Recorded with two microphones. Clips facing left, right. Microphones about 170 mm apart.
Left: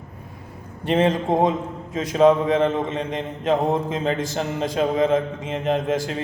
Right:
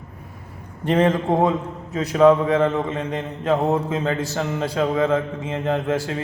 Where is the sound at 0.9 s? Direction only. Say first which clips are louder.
Right 1 dB; 15° left (ahead or behind).